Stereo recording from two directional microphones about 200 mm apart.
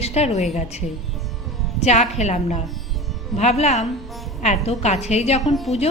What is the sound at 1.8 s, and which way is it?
A woman's voice, 35° left (ahead or behind).